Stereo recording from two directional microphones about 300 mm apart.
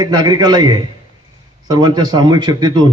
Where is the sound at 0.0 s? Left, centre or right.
Centre.